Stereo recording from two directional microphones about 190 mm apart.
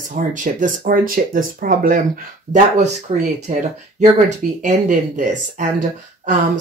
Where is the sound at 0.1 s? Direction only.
45° right (ahead or behind).